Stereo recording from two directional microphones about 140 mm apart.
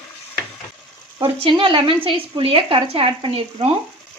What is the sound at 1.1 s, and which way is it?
Speech, 35° right (ahead or behind).